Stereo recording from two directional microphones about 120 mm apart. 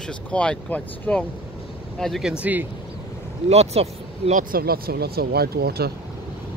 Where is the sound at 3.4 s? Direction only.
60° right (ahead or behind).